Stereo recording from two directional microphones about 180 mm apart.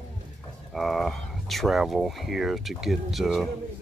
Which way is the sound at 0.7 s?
Centre (ahead or behind).